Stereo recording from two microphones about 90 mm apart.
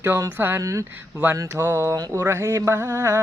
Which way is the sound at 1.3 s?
35° right (ahead or behind).